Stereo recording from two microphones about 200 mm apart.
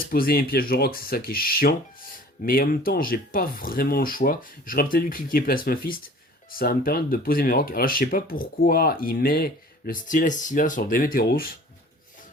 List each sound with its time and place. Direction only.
0.0 s speech: 50° left (ahead or behind)